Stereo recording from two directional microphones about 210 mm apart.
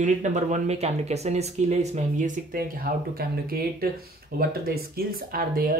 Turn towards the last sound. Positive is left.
turn(degrees=-45)  # may be behind; listen again after turning